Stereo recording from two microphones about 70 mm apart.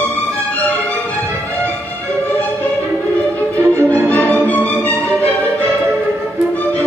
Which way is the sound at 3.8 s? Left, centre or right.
Left.